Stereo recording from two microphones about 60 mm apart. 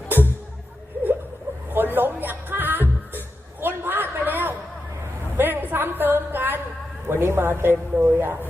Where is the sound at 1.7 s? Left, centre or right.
Right.